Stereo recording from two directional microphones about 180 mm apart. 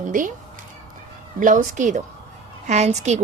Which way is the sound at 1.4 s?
45° right (ahead or behind).